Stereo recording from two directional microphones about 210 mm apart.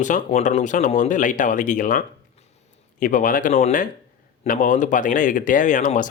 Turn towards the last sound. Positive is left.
turn(degrees=35)  # may be behind; listen again after turning